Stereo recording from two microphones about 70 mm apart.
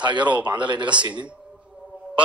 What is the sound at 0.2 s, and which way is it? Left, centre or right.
Speech, centre.